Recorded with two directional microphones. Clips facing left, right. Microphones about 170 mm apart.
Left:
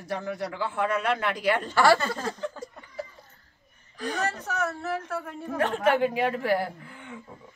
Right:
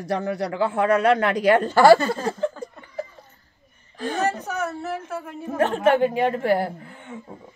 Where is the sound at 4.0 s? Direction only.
25° right (ahead or behind).